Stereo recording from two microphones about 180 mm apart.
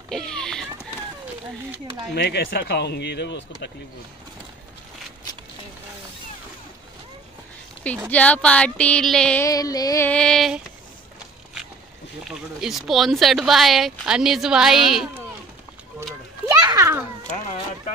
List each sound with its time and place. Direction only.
0.1 s vehicle: 5° left (ahead or behind)
2.1 s speech: 65° left (ahead or behind)
8.1 s speech: 5° left (ahead or behind)
9.5 s music: 20° left (ahead or behind)
10.0 s speech: 5° left (ahead or behind)
12.3 s speech: centre (ahead or behind)
16.4 s children playing: 20° right (ahead or behind)